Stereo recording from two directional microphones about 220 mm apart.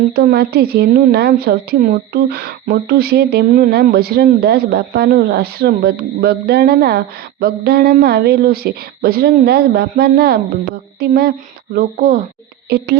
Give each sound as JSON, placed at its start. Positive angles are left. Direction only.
{"t": 0.2, "sound": "a woman's voice", "side_deg": -45}